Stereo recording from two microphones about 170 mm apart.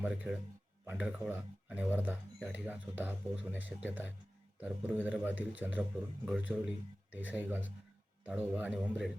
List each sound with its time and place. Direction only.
0.0 s speech: 5° right (ahead or behind)